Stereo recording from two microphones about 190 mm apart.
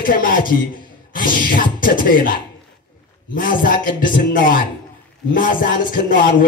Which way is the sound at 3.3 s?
45° left (ahead or behind).